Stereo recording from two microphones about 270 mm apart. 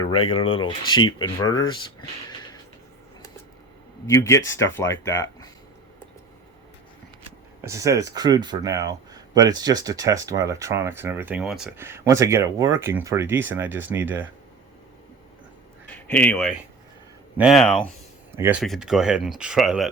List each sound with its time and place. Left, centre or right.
0.5 s speech: centre
4.0 s speech: centre
7.6 s speech: centre
16.0 s speech: centre